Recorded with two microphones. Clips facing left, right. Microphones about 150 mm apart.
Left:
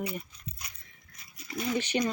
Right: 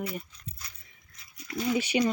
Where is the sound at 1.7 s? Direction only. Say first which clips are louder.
Right 3 dB; 10° right (ahead or behind).